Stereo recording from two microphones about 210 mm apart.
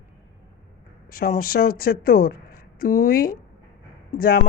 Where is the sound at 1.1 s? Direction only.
45° left (ahead or behind).